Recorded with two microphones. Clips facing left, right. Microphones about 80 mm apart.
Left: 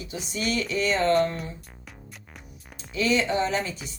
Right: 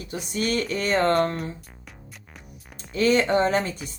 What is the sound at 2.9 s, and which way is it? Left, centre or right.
Speech, right.